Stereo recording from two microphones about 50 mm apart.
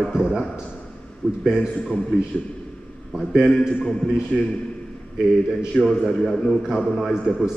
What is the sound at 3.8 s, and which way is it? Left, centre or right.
Speech, centre.